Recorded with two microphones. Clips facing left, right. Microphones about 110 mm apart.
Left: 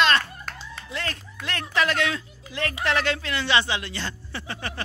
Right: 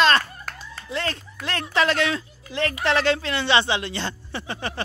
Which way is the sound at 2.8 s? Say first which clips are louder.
Right 4 dB; 30° right (ahead or behind).